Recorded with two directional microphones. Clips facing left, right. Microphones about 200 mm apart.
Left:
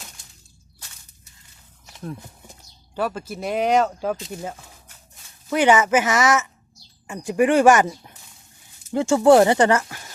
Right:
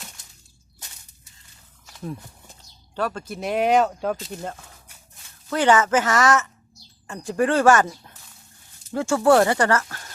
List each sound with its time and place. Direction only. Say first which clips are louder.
2.5 s speech: left 2 dB; 10° left (ahead or behind)